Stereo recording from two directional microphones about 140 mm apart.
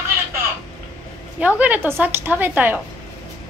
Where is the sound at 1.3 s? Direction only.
10° right (ahead or behind).